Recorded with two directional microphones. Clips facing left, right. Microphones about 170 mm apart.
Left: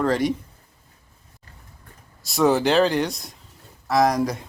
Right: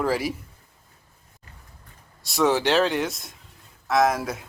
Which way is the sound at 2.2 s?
Centre (ahead or behind).